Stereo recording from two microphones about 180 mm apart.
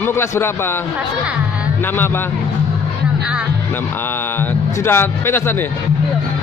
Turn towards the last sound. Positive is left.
turn(degrees=10)  # may be behind; listen again after turning